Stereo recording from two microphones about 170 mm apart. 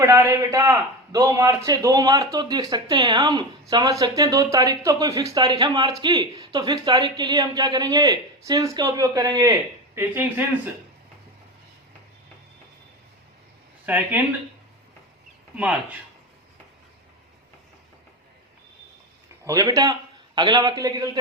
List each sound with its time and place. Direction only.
0.0 s a man's voice: 15° right (ahead or behind)
13.8 s speech: 10° right (ahead or behind)
15.5 s speech: 10° right (ahead or behind)
19.5 s a man's voice: 20° right (ahead or behind)